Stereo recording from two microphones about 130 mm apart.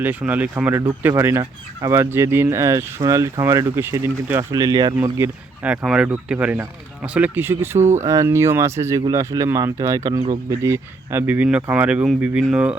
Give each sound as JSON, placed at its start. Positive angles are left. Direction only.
{"t": 0.0, "sound": "speech", "side_deg": -10}
{"t": 5.0, "sound": "speech", "side_deg": -20}
{"t": 5.6, "sound": "speech", "side_deg": -5}